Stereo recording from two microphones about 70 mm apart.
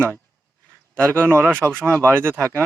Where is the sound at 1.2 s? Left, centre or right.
Right.